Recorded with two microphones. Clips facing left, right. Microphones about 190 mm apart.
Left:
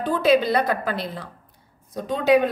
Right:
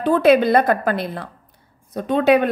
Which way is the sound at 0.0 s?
60° right (ahead or behind).